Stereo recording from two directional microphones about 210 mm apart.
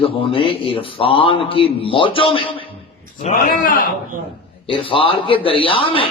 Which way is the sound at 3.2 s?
40° left (ahead or behind).